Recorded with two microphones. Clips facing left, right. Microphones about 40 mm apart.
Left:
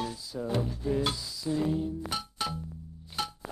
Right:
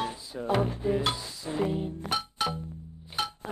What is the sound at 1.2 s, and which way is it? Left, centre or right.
Music, right.